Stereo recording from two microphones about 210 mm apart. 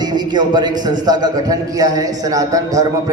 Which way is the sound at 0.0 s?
20° right (ahead or behind).